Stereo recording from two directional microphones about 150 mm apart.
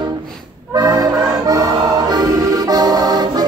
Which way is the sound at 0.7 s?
25° right (ahead or behind).